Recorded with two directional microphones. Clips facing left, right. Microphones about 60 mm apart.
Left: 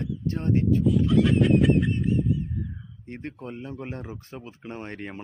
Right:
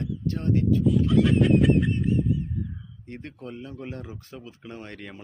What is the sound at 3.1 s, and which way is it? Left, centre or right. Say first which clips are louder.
Speech: left 2 dB; left.